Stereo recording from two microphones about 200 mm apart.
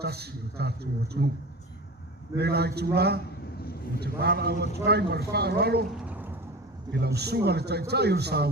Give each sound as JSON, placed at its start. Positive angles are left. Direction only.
{"t": 0.0, "sound": "a man's voice", "side_deg": -55}
{"t": 2.4, "sound": "a man's voice", "side_deg": -55}
{"t": 3.6, "sound": "vehicle", "side_deg": 50}
{"t": 4.0, "sound": "a man's voice", "side_deg": -55}
{"t": 6.1, "sound": "a sound", "side_deg": -10}
{"t": 6.9, "sound": "a man's voice", "side_deg": -55}